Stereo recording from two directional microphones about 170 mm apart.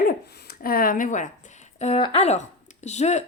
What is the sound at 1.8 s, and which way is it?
Speech, 40° left (ahead or behind).